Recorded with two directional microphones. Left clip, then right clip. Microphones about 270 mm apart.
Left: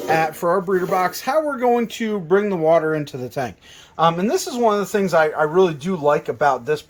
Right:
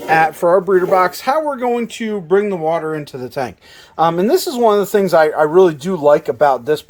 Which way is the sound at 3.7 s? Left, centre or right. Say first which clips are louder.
Right 2 dB; right.